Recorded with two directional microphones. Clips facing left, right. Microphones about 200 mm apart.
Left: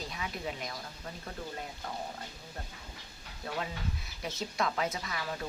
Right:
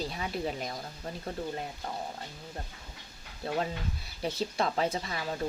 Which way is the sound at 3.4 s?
30° right (ahead or behind).